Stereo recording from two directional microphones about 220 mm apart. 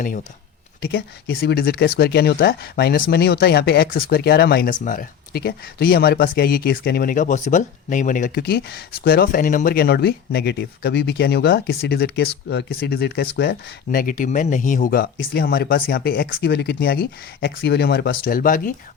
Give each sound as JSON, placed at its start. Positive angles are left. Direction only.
{"t": 0.8, "sound": "speech", "side_deg": 45}